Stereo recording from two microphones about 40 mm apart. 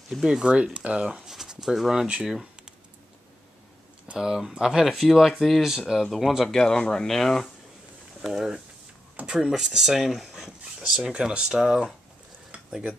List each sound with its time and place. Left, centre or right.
0.1 s speech: centre
0.5 s speech: right
1.0 s speech: centre
4.2 s speech: centre
6.5 s speech: centre
8.3 s speech: centre
11.1 s speech: right